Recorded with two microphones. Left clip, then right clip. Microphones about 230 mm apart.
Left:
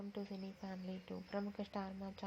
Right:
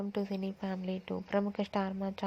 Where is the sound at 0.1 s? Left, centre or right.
Right.